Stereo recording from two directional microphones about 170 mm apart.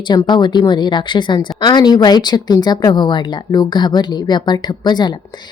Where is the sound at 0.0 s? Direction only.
25° left (ahead or behind).